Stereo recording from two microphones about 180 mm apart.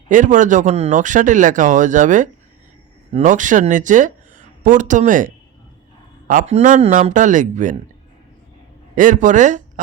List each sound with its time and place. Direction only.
0.1 s speech: 45° right (ahead or behind)
9.0 s speech: 45° right (ahead or behind)